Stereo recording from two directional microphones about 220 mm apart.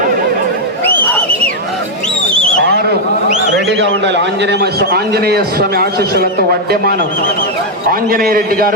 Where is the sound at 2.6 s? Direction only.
45° right (ahead or behind).